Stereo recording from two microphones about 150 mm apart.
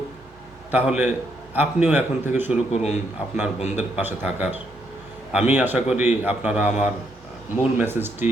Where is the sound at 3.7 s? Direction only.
10° right (ahead or behind).